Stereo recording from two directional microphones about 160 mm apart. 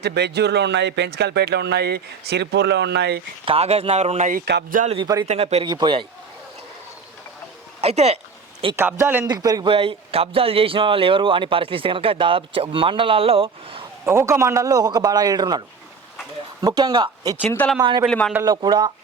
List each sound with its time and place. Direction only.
0.0 s speech: 90° right
3.4 s a man's voice: 40° right (ahead or behind)
4.3 s speech: 75° right (ahead or behind)
4.9 s a man's voice: 25° right (ahead or behind)
5.3 s a man's voice: 40° right (ahead or behind)
5.6 s a man's voice: 30° right (ahead or behind)
7.8 s speech: 40° right (ahead or behind)
8.7 s a man's voice: 15° right (ahead or behind)
9.2 s a man's voice: 25° right (ahead or behind)
14.0 s a man's voice: 15° right (ahead or behind)
17.4 s speech: 10° left (ahead or behind)
17.7 s a man's voice: 30° right (ahead or behind)
18.1 s a man's voice: 5° left (ahead or behind)
18.4 s a man's voice: 25° right (ahead or behind)